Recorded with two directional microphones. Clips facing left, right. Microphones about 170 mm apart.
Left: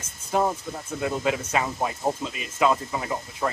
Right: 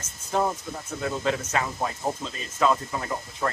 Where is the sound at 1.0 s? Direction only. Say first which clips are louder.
Left 1 dB; 10° left (ahead or behind).